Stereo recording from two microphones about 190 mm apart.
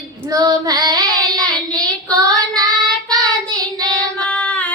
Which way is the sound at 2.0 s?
20° right (ahead or behind).